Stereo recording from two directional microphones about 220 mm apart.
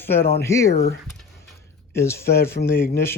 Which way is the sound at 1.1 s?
Centre (ahead or behind).